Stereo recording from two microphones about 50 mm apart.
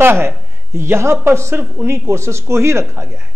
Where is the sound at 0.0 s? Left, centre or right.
Right.